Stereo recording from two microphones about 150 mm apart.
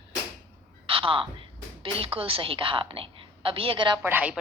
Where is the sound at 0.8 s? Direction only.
35° right (ahead or behind).